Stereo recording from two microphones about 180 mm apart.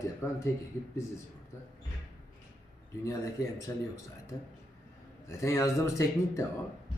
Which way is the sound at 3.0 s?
20° left (ahead or behind).